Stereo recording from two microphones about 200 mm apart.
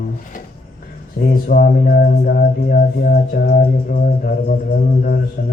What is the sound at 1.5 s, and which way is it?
Mantra, 45° left (ahead or behind).